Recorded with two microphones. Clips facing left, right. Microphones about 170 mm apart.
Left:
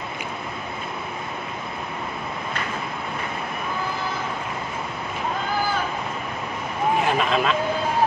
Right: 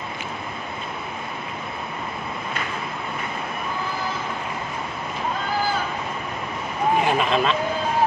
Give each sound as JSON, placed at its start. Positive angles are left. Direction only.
{"t": 7.1, "sound": "speech", "side_deg": 0}